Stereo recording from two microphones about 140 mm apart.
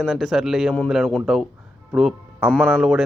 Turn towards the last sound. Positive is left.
turn(degrees=0)  # may be behind; listen again after turning